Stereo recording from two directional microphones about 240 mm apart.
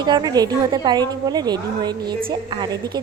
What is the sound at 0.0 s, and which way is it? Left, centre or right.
A woman's voice, centre.